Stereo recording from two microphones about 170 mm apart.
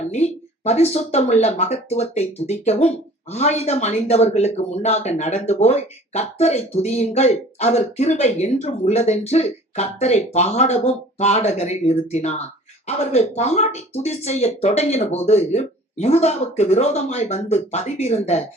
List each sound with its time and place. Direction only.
0.1 s speech: 40° left (ahead or behind)